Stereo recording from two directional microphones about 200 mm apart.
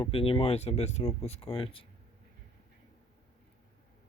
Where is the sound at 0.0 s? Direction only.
30° left (ahead or behind).